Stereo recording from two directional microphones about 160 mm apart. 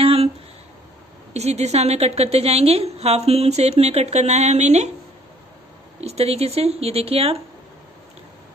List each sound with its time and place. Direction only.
0.0 s a sound: 35° right (ahead or behind)
1.3 s a woman's voice: 45° right (ahead or behind)
5.9 s speech: 40° right (ahead or behind)